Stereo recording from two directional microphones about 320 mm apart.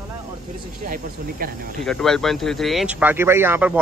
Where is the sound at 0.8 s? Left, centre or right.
Right.